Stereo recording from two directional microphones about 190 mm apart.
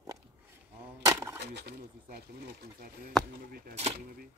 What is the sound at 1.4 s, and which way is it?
Speech, 55° right (ahead or behind).